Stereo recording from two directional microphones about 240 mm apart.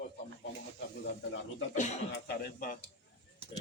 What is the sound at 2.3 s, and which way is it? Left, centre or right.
Speech, left.